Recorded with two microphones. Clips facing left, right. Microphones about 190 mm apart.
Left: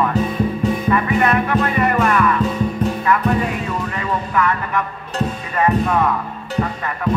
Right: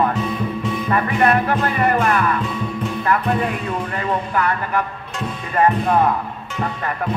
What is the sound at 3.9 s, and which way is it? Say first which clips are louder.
Music: even; 40° right (ahead or behind).